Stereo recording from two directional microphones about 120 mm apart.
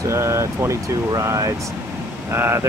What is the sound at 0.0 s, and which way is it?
Speech, 25° right (ahead or behind).